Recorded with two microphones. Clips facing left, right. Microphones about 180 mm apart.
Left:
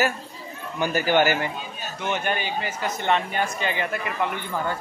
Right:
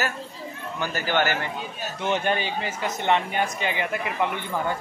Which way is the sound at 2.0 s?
30° right (ahead or behind).